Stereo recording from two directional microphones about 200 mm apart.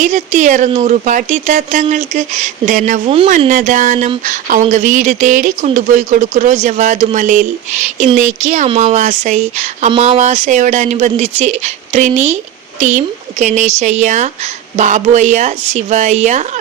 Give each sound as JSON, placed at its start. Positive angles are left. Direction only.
{"t": 0.0, "sound": "speech", "side_deg": -35}